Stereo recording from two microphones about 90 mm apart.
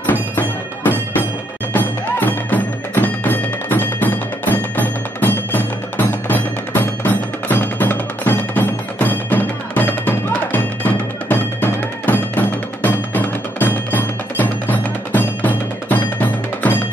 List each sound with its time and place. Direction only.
0.0 s music: 20° left (ahead or behind)